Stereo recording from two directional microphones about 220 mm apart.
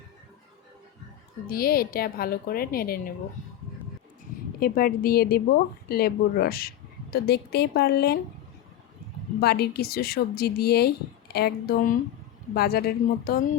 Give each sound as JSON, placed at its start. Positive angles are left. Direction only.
{"t": 1.5, "sound": "a woman's voice", "side_deg": 45}
{"t": 4.6, "sound": "a woman's voice", "side_deg": 40}
{"t": 9.4, "sound": "a woman's voice", "side_deg": 45}